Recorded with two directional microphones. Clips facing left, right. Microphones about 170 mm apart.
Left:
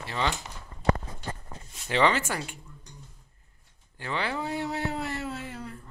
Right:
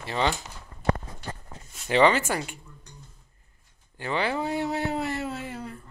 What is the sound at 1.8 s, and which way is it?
Speech, 15° right (ahead or behind).